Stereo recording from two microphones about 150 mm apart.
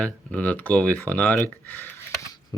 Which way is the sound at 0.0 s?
10° left (ahead or behind).